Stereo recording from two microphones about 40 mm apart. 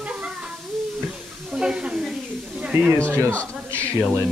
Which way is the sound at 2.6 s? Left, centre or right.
Right.